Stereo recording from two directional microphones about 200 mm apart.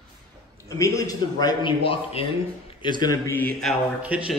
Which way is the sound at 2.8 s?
20° left (ahead or behind).